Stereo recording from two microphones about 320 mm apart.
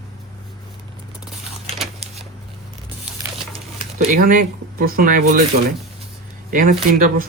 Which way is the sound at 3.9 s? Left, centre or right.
Right.